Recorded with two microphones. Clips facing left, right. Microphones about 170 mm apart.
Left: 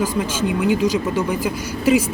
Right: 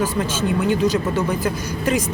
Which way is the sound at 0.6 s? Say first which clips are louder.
Left 1 dB; 10° left (ahead or behind).